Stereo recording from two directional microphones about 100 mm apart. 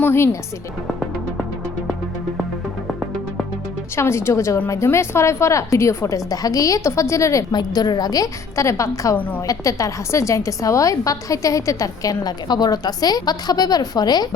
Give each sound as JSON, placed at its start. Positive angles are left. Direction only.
{"t": 0.0, "sound": "a woman's voice", "side_deg": 25}
{"t": 0.9, "sound": "music", "side_deg": -5}
{"t": 3.9, "sound": "a woman's voice", "side_deg": 25}
{"t": 7.5, "sound": "a woman's voice", "side_deg": 45}
{"t": 9.1, "sound": "a woman's voice", "side_deg": 15}
{"t": 9.5, "sound": "a woman's voice", "side_deg": 35}